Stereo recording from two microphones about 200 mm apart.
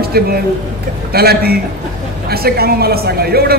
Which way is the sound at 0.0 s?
50° right (ahead or behind).